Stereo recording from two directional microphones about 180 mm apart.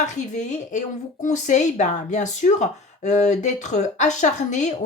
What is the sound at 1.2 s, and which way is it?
A woman's voice, 40° left (ahead or behind).